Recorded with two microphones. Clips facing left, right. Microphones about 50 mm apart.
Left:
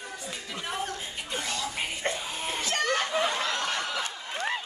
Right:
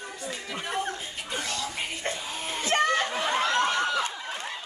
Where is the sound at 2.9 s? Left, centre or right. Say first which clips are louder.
Right 1 dB; right.